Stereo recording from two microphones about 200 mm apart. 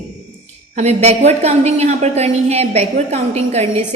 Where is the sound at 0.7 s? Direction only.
30° right (ahead or behind).